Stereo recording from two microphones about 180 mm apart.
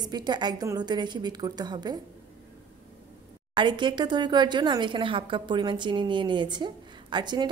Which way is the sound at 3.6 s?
25° right (ahead or behind).